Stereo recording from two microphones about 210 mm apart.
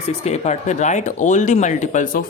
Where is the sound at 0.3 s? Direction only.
35° left (ahead or behind).